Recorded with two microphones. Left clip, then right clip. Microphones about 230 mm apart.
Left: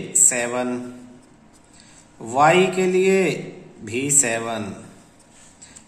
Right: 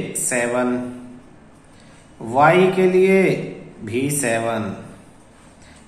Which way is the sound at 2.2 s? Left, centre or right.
Centre.